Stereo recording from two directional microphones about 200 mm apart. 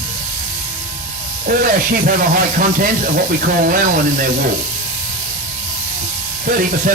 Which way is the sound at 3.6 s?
45° right (ahead or behind).